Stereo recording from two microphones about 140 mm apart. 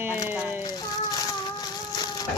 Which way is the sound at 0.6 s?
30° left (ahead or behind).